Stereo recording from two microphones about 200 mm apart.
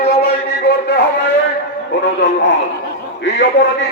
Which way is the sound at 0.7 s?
55° left (ahead or behind).